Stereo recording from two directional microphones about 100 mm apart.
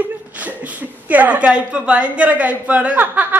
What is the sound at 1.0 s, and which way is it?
A woman's voice, 15° right (ahead or behind).